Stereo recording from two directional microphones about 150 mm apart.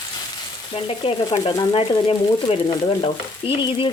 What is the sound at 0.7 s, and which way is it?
Speech, 40° left (ahead or behind).